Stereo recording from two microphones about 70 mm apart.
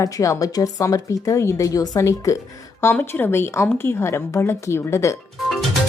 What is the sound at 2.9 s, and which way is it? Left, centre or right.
A woman's voice, left.